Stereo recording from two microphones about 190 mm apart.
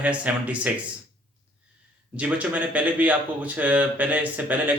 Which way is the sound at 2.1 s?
10° right (ahead or behind).